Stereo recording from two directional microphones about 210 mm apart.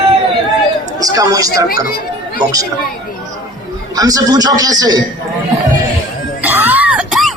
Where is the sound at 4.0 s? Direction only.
15° right (ahead or behind).